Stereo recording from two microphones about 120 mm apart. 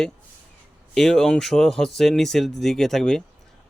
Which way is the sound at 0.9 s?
5° left (ahead or behind).